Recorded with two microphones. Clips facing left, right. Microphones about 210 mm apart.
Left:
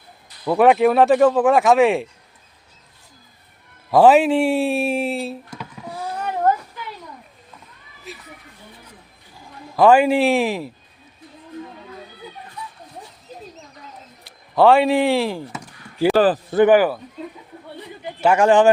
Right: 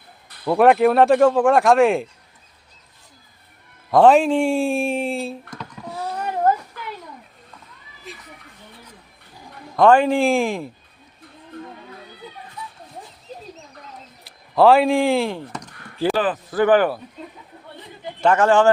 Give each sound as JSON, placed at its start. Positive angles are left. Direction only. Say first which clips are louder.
{"t": 0.4, "sound": "speech", "louder": "even", "side_deg": 0}
{"t": 3.9, "sound": "speech", "louder": "left 1 dB", "side_deg": 5}
{"t": 8.1, "sound": "a sound", "louder": "left 2 dB", "side_deg": 5}
{"t": 9.7, "sound": "speech", "louder": "left 1 dB", "side_deg": 5}
{"t": 14.3, "sound": "a sound", "louder": "even", "side_deg": 0}
{"t": 16.1, "sound": "speech", "louder": "left 6 dB", "side_deg": 35}
{"t": 16.6, "sound": "speech", "louder": "left 2 dB", "side_deg": 10}
{"t": 18.0, "sound": "speech", "louder": "left 1 dB", "side_deg": 10}